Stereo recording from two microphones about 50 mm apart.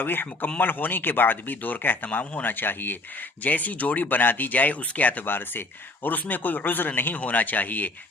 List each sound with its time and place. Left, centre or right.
0.0 s speech: left